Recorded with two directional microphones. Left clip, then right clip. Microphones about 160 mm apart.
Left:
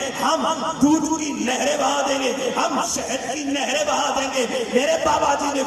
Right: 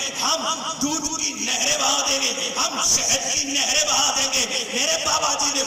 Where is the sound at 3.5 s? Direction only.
55° left (ahead or behind).